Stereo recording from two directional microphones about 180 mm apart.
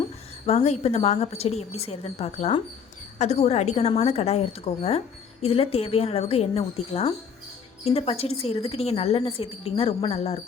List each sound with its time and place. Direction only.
0.4 s a woman's voice: 35° left (ahead or behind)